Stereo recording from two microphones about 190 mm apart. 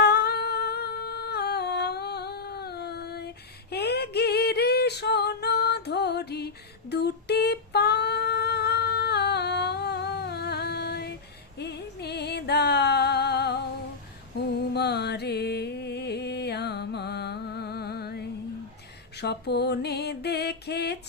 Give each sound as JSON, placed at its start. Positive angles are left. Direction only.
{"t": 0.0, "sound": "humming", "side_deg": 60}
{"t": 3.7, "sound": "female singing", "side_deg": 60}
{"t": 11.5, "sound": "music", "side_deg": 60}
{"t": 14.7, "sound": "music", "side_deg": 60}